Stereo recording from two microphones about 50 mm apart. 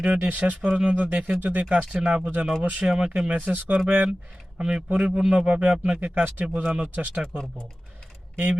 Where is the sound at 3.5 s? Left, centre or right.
Right.